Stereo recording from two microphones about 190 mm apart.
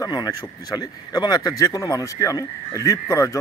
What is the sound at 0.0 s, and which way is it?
A man's voice, 20° left (ahead or behind).